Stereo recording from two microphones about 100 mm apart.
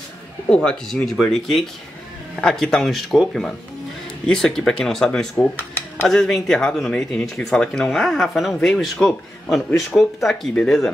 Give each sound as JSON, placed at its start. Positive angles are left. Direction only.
{"t": 0.7, "sound": "speech", "side_deg": 5}
{"t": 5.4, "sound": "dishes", "side_deg": 20}
{"t": 6.0, "sound": "speech", "side_deg": 5}